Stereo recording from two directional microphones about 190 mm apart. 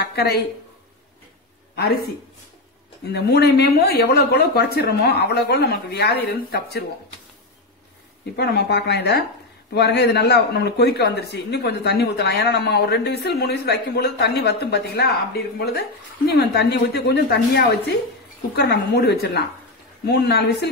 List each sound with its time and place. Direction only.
0.0 s speech: 55° left (ahead or behind)
3.1 s a man's voice: 60° left (ahead or behind)
8.4 s a man's voice: 60° left (ahead or behind)
16.3 s a man's voice: 60° left (ahead or behind)